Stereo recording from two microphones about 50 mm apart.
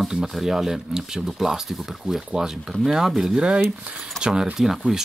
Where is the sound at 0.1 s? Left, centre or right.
Centre.